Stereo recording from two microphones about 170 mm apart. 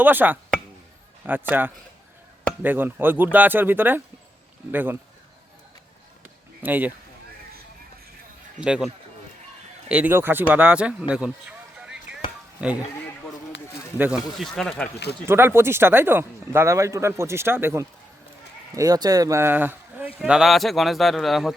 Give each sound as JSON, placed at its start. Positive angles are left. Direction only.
{"t": 0.0, "sound": "speech", "side_deg": -10}
{"t": 6.6, "sound": "speech", "side_deg": -10}
{"t": 8.6, "sound": "speech", "side_deg": -5}
{"t": 9.9, "sound": "speech", "side_deg": -10}
{"t": 11.8, "sound": "a sound", "side_deg": -5}
{"t": 12.6, "sound": "speech", "side_deg": -5}
{"t": 14.0, "sound": "speech", "side_deg": -5}
{"t": 15.3, "sound": "speech", "side_deg": -15}